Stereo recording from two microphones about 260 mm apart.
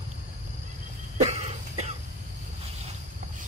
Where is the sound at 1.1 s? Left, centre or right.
Right.